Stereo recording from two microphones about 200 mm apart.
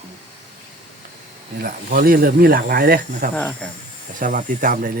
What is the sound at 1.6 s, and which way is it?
Speech, 45° right (ahead or behind).